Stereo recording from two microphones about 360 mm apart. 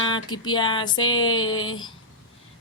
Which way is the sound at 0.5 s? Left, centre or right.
Centre.